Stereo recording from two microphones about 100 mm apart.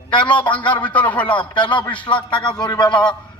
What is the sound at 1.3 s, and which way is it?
A man's voice, 50° left (ahead or behind).